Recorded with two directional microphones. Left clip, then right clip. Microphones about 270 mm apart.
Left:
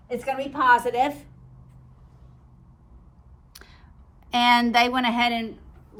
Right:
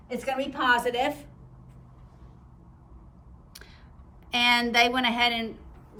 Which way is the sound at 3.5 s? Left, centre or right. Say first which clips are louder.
Left 1 dB; centre.